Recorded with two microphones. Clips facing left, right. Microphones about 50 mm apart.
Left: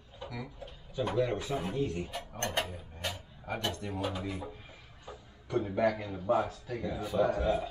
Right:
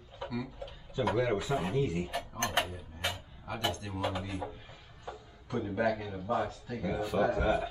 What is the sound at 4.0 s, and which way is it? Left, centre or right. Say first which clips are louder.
Speech: right 2 dB; right.